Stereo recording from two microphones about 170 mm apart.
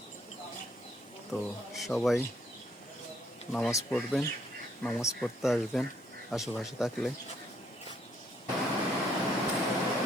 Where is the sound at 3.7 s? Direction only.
20° left (ahead or behind).